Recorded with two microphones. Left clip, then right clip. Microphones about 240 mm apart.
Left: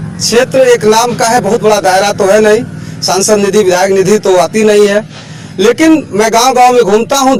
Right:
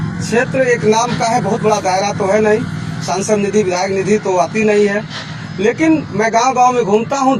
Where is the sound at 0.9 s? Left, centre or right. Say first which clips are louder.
Left 6 dB; left.